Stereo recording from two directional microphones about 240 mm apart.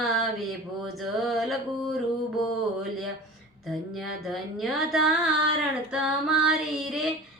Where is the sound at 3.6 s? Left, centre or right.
Centre.